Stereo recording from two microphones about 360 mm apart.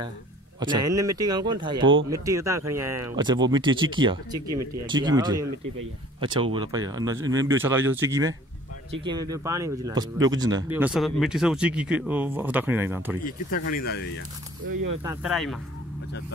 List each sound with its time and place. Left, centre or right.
0.6 s speech: centre
13.2 s speech: left
15.0 s speech: centre